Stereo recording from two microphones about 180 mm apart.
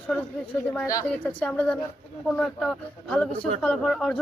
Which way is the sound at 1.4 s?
10° left (ahead or behind).